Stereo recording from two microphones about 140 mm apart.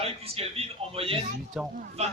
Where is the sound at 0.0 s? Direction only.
45° right (ahead or behind).